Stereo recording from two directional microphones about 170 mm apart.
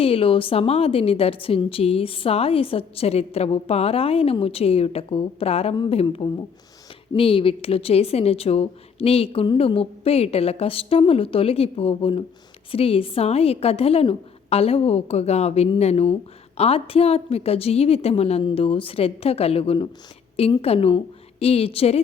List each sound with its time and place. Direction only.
0.0 s a woman's voice: 35° left (ahead or behind)